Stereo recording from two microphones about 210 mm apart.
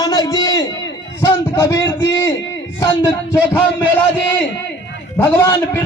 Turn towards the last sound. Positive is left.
turn(degrees=10)  # may be behind; listen again after turning